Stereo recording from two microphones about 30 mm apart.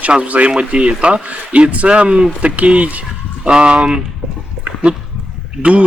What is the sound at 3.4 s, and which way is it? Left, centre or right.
Speech, right.